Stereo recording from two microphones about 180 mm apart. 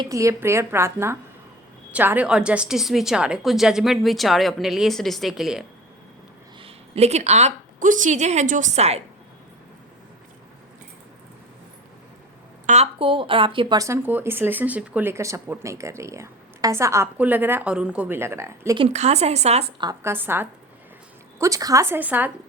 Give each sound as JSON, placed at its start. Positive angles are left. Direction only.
{"t": 0.0, "sound": "a woman's voice", "side_deg": -15}
{"t": 6.6, "sound": "a woman's voice", "side_deg": -35}
{"t": 12.6, "sound": "speech", "side_deg": -35}
{"t": 18.8, "sound": "speech", "side_deg": -35}
{"t": 19.8, "sound": "speech", "side_deg": -15}